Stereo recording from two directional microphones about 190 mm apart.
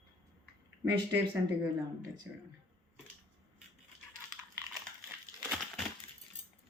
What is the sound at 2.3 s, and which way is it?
Speech, 5° right (ahead or behind).